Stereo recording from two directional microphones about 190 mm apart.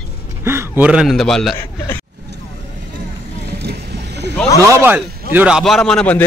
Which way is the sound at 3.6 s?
60° right (ahead or behind).